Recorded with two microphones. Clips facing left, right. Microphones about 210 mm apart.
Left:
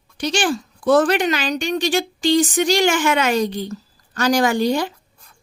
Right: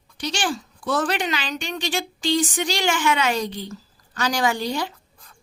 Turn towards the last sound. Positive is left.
turn(degrees=50)  # may be behind; listen again after turning